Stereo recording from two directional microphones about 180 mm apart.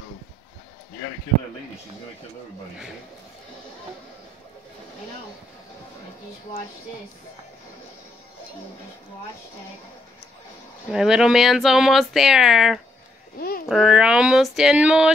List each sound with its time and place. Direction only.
10.9 s speech: 5° right (ahead or behind)
13.4 s a child's voice: 55° left (ahead or behind)
13.7 s speech: 5° right (ahead or behind)